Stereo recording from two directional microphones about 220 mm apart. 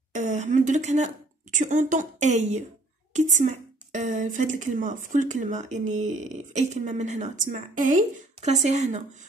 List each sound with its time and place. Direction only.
0.1 s a woman's voice: 35° right (ahead or behind)